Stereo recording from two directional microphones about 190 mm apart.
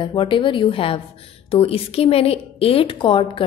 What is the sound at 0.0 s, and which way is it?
A woman's voice, 25° left (ahead or behind).